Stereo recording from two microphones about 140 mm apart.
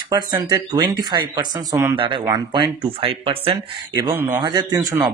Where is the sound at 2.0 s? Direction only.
35° right (ahead or behind).